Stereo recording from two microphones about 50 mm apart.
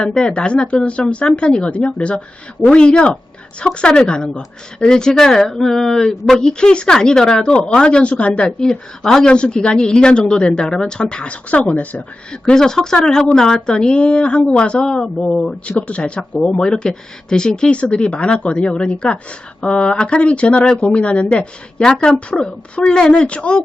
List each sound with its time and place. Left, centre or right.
0.2 s speech: centre
12.3 s speech: centre